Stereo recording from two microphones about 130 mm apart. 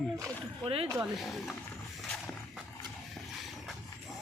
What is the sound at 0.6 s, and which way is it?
Speech, 45° right (ahead or behind).